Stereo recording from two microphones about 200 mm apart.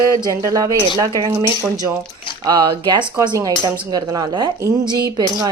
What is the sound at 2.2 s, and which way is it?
Squish, 20° left (ahead or behind).